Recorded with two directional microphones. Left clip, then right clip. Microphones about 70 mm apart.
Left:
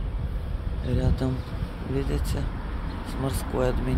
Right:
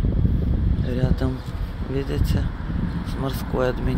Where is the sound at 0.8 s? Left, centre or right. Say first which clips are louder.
Right 2 dB; centre.